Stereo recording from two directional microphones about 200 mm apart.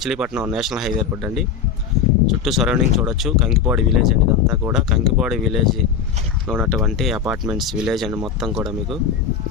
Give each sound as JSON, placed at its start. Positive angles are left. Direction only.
{"t": 0.0, "sound": "speech", "side_deg": -5}